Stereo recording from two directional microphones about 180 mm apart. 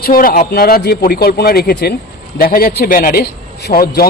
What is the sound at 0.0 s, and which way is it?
A man's voice, 50° left (ahead or behind).